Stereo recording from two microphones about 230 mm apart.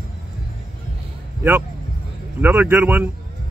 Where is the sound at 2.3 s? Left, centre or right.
Centre.